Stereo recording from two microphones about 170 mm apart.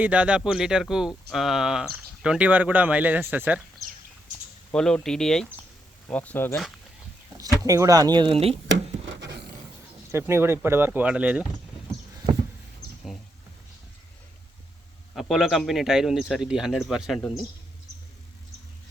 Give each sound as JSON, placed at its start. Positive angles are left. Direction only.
{"t": 0.0, "sound": "speech", "side_deg": -10}
{"t": 4.7, "sound": "speech", "side_deg": 5}
{"t": 7.3, "sound": "speech", "side_deg": -20}
{"t": 8.6, "sound": "a sound", "side_deg": -90}
{"t": 10.1, "sound": "speech", "side_deg": -15}
{"t": 15.1, "sound": "speech", "side_deg": 0}